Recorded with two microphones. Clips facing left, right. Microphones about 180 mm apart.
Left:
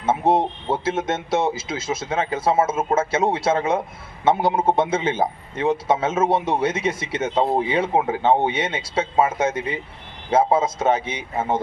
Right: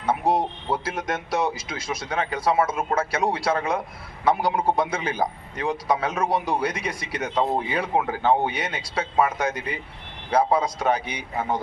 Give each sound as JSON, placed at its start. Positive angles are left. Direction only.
{"t": 0.0, "sound": "speech", "side_deg": 25}